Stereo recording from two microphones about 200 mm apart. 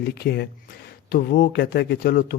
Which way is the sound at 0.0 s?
55° left (ahead or behind).